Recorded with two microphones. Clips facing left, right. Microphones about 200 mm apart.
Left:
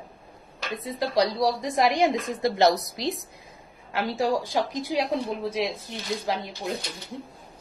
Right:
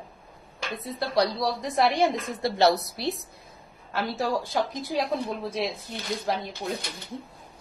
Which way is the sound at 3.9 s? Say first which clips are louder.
Left 2 dB; 10° left (ahead or behind).